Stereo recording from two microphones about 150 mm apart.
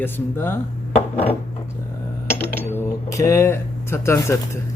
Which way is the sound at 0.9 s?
45° left (ahead or behind).